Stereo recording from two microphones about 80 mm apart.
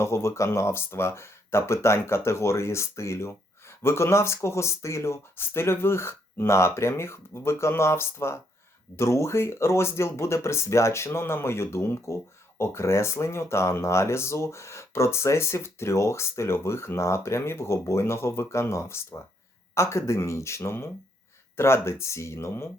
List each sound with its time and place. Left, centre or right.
0.0 s speech: left